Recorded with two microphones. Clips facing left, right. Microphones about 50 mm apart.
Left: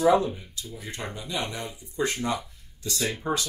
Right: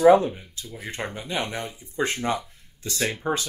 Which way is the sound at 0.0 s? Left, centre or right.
Right.